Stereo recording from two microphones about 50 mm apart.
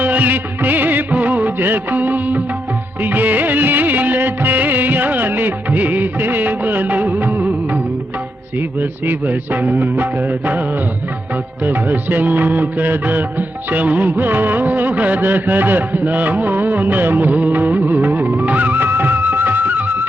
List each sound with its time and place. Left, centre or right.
0.0 s music of bollywood: right
3.0 s music: right
8.8 s music: right
11.6 s music: right